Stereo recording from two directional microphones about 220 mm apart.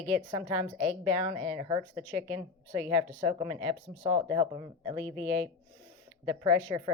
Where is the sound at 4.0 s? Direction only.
20° right (ahead or behind).